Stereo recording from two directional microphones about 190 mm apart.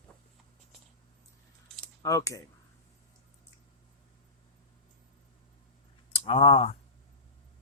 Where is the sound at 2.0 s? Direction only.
15° left (ahead or behind).